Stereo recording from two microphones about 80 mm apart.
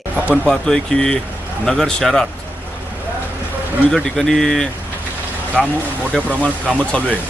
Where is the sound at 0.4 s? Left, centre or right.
Centre.